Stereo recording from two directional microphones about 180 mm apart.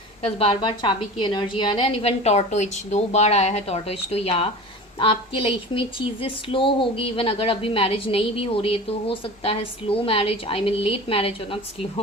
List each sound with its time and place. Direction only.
0.2 s a woman's voice: 35° left (ahead or behind)